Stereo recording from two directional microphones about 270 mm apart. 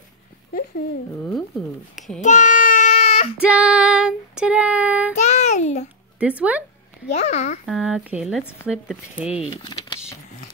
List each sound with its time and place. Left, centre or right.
2.0 s a child's voice: centre
2.2 s baby cry: left
3.4 s child singing: centre
5.1 s child singing: left
6.1 s speech: centre
7.2 s a child's voice: left
7.6 s speech: centre
9.5 s speech: centre